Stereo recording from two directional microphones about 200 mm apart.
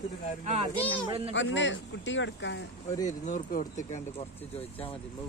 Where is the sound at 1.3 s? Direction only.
65° left (ahead or behind).